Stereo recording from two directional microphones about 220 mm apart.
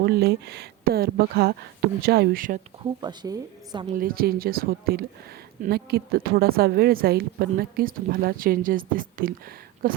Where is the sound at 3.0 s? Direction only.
20° right (ahead or behind).